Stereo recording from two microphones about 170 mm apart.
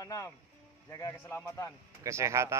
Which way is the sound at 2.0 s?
15° right (ahead or behind).